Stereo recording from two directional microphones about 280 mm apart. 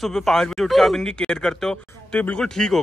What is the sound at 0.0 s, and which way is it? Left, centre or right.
Speech, centre.